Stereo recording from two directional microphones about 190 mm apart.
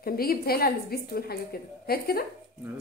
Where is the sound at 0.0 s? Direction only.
50° left (ahead or behind).